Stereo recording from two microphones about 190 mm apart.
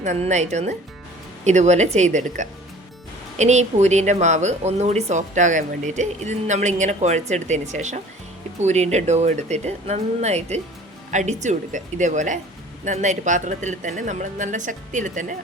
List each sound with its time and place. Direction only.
0.0 s speech: 40° right (ahead or behind)